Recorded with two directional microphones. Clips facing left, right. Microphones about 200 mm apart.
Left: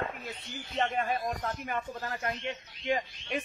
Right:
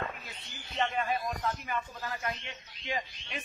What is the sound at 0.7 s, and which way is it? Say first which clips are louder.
Speech: left 1 dB; 50° left (ahead or behind).